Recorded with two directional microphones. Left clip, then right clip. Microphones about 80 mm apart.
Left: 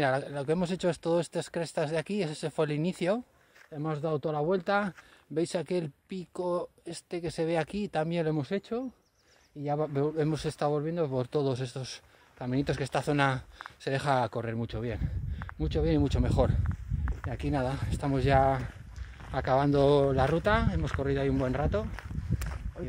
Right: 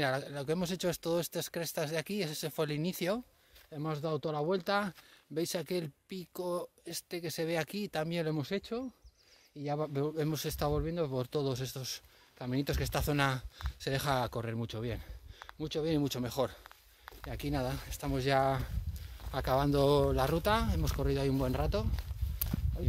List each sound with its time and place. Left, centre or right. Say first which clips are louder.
0.0 s speech: left 5 dB; left
3.7 s speech: left 4 dB; centre
5.3 s speech: left 5 dB; left
8.4 s speech: left 4 dB; centre
10.7 s speech: left 4 dB; centre
11.1 s speech: left 5 dB; left
14.3 s speech: left 4 dB; centre
16.6 s a sound: left 9 dB; centre
17.4 s speech: left 5 dB; left
17.8 s speech: left 6 dB; left
18.4 s speech: left 5 dB; centre
20.7 s speech: left 4 dB; right
21.0 s speech: left 4 dB; right
21.9 s walk: left 7 dB; centre